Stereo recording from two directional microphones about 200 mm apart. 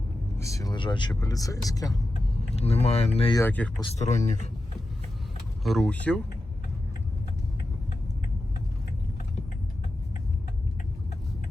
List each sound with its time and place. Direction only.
0.3 s speech: 15° left (ahead or behind)
2.6 s speech: 30° left (ahead or behind)
3.3 s speech: 10° left (ahead or behind)
3.9 s speech: 35° left (ahead or behind)
5.6 s speech: centre (ahead or behind)